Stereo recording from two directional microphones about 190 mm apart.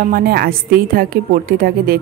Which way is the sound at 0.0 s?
50° right (ahead or behind).